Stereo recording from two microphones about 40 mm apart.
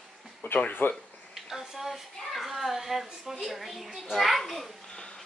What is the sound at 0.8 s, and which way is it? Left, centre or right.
Speech, left.